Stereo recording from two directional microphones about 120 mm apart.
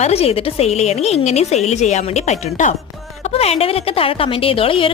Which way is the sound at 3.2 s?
60° left (ahead or behind).